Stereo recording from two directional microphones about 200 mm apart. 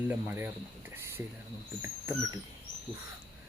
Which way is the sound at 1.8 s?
15° right (ahead or behind).